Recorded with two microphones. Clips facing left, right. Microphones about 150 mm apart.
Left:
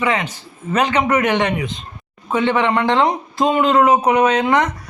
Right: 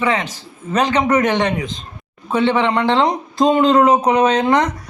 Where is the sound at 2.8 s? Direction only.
25° right (ahead or behind).